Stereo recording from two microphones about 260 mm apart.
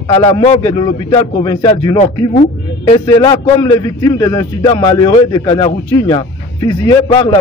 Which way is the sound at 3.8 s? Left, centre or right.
Centre.